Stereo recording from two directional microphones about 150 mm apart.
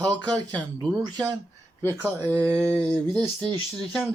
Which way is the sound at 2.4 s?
10° left (ahead or behind).